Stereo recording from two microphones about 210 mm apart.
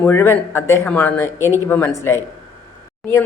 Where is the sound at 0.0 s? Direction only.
10° left (ahead or behind).